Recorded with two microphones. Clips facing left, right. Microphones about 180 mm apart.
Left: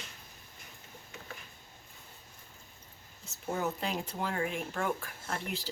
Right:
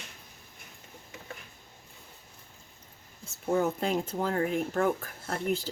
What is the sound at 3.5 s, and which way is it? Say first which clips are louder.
Speech: right 7 dB; 50° right (ahead or behind).